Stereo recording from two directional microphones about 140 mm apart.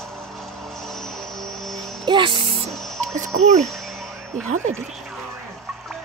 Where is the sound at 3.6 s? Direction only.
Centre (ahead or behind).